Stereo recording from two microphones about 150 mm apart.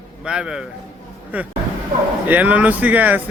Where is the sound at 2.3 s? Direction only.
10° right (ahead or behind).